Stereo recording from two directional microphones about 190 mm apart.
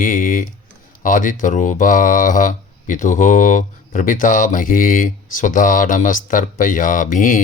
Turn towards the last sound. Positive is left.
turn(degrees=45)  # may be behind; listen again after turning